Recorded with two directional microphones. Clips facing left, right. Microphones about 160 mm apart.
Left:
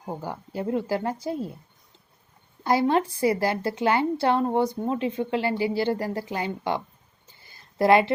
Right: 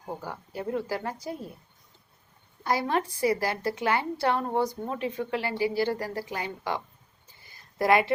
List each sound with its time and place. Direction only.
0.3 s a woman's voice: 25° left (ahead or behind)
2.6 s a woman's voice: 25° left (ahead or behind)